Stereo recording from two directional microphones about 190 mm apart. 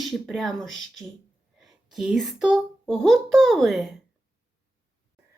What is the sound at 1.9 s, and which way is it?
A woman's voice, centre (ahead or behind).